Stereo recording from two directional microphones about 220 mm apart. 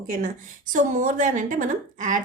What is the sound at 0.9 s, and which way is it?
Speech, 35° right (ahead or behind).